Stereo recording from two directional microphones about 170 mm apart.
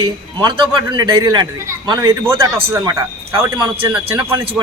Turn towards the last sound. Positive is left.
turn(degrees=-15)  # may be behind; listen again after turning